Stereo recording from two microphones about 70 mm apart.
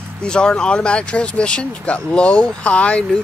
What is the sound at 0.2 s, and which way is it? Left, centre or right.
Speech, centre.